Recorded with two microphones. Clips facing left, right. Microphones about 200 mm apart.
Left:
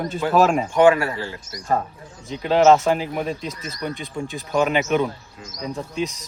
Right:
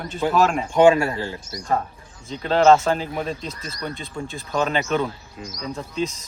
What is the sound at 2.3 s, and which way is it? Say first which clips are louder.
Speech: left 1 dB; 10° left (ahead or behind).